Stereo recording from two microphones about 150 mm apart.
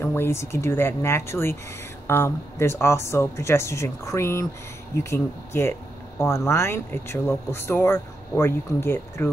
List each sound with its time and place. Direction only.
0.0 s speech: 15° left (ahead or behind)